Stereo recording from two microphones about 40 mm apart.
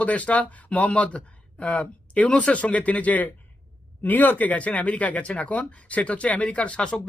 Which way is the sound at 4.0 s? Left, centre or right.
Left.